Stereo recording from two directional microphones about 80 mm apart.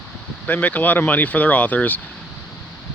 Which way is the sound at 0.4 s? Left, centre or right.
Centre.